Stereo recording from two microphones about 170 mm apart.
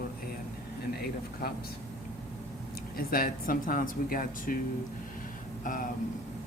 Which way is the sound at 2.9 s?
60° left (ahead or behind).